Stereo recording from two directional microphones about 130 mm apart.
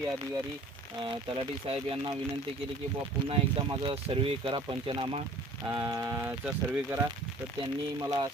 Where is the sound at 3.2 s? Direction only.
45° right (ahead or behind).